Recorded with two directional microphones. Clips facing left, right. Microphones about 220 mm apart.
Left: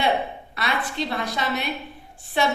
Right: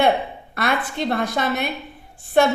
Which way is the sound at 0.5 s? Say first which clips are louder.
Right 5 dB; 50° right (ahead or behind).